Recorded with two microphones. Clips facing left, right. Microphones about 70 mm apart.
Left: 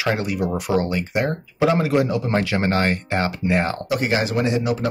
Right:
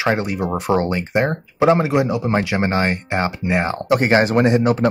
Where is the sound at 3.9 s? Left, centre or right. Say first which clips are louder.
Right 8 dB; right.